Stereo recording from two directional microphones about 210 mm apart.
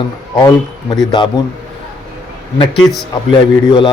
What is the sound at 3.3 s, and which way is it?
Speech, 25° left (ahead or behind).